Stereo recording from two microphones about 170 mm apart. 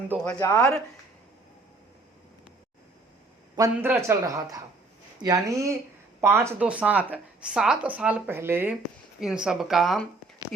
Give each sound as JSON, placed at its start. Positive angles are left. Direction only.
{"t": 0.3, "sound": "speech", "side_deg": 20}
{"t": 3.5, "sound": "speech", "side_deg": -15}